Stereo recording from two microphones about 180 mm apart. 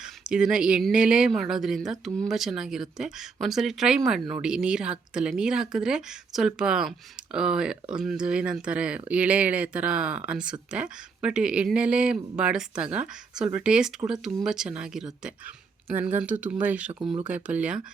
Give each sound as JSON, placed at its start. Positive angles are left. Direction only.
{"t": 0.0, "sound": "speech", "side_deg": -5}
{"t": 17.0, "sound": "speech", "side_deg": -30}
{"t": 17.2, "sound": "speech", "side_deg": -5}